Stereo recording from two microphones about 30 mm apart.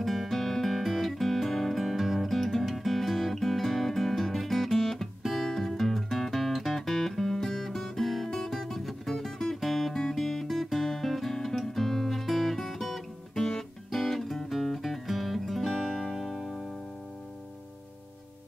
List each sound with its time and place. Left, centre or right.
0.0 s music: centre
13.3 s guitar: centre
14.0 s music: centre